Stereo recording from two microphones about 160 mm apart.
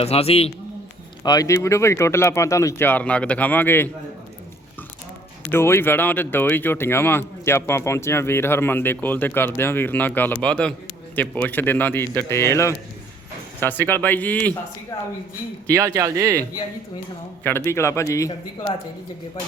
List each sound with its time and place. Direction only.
0.0 s a man's voice: 40° left (ahead or behind)
1.2 s speech: 25° left (ahead or behind)
5.5 s speech: 15° left (ahead or behind)
14.9 s a sound: 25° left (ahead or behind)
15.6 s speech: 20° right (ahead or behind)
17.4 s speech: 15° left (ahead or behind)